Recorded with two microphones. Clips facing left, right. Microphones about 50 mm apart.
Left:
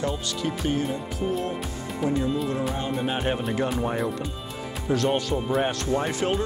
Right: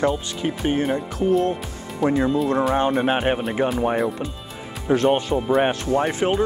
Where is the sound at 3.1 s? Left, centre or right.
Right.